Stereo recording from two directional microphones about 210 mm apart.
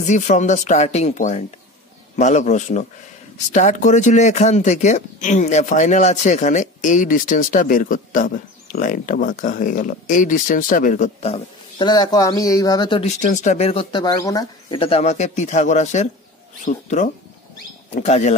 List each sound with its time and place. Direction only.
0.0 s speech: 35° left (ahead or behind)
13.2 s speech: 35° left (ahead or behind)